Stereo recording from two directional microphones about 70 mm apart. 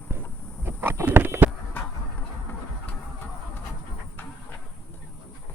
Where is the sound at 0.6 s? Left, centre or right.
Right.